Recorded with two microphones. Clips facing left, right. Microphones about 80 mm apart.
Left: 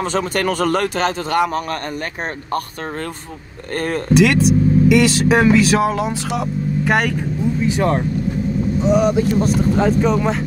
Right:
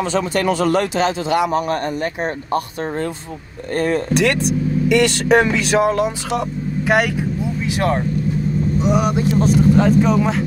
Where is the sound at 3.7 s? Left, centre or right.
Left.